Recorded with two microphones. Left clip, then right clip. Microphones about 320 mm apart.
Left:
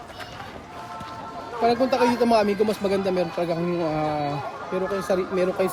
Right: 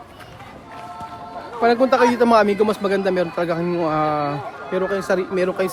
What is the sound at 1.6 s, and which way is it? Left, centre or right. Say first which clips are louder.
A man's voice: right 5 dB; centre.